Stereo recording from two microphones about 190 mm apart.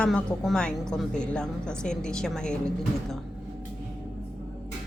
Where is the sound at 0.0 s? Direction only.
5° left (ahead or behind).